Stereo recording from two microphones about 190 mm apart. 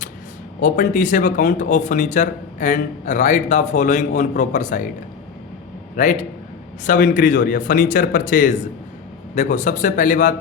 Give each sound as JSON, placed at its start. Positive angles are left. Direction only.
{"t": 0.6, "sound": "speech", "side_deg": 45}
{"t": 6.0, "sound": "speech", "side_deg": 40}